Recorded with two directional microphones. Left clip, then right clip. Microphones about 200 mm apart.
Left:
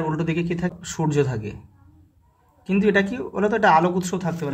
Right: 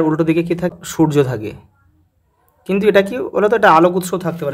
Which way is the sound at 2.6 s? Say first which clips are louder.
Right 7 dB; 40° right (ahead or behind).